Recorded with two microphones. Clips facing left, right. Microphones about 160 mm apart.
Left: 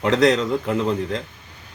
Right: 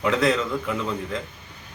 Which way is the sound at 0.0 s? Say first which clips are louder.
Left 4 dB; 40° left (ahead or behind).